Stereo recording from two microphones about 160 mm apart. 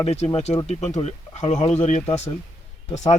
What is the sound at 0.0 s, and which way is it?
Speech, 40° left (ahead or behind).